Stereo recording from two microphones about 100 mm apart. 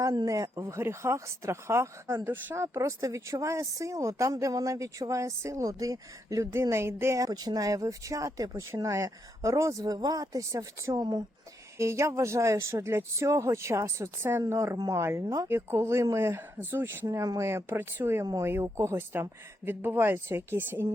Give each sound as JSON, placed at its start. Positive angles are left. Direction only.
{"t": 0.0, "sound": "speech", "side_deg": -35}
{"t": 15.2, "sound": "speech", "side_deg": -40}
{"t": 15.4, "sound": "speech", "side_deg": -25}